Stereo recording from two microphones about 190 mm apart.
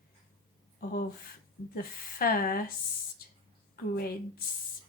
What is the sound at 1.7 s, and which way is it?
A woman's voice, 50° left (ahead or behind).